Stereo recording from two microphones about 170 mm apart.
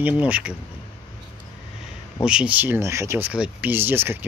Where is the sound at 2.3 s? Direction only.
5° right (ahead or behind).